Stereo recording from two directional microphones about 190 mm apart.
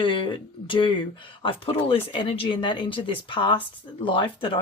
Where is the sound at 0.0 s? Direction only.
25° left (ahead or behind).